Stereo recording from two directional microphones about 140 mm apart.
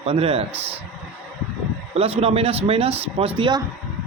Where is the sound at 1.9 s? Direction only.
45° right (ahead or behind).